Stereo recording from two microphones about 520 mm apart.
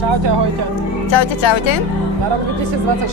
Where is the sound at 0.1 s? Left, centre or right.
Right.